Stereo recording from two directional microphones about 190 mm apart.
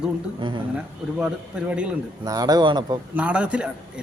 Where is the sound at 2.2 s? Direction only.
20° right (ahead or behind).